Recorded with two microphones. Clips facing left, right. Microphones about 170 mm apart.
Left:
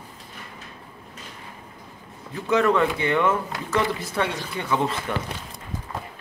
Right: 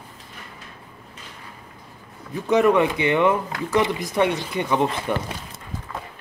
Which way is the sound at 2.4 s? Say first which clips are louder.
Right 3 dB; 15° right (ahead or behind).